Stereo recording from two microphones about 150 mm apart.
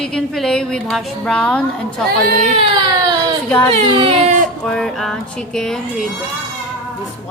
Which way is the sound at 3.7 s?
40° right (ahead or behind).